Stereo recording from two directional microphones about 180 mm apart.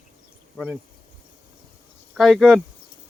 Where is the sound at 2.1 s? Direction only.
Centre (ahead or behind).